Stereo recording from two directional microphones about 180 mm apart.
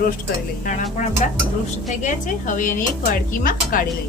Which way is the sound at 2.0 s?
45° left (ahead or behind).